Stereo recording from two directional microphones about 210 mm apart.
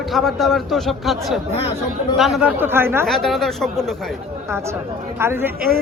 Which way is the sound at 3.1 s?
Centre (ahead or behind).